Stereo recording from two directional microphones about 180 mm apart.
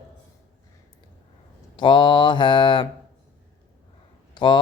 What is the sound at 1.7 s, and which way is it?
Mantra, 25° left (ahead or behind).